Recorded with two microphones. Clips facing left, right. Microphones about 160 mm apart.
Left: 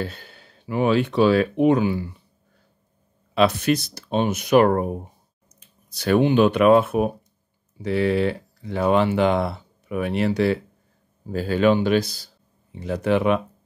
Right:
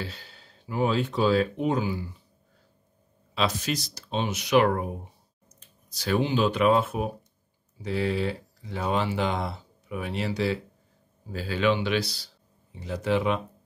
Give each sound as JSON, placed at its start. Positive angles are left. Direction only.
{"t": 0.0, "sound": "speech", "side_deg": 55}
{"t": 3.3, "sound": "speech", "side_deg": 60}
{"t": 5.5, "sound": "speech", "side_deg": 60}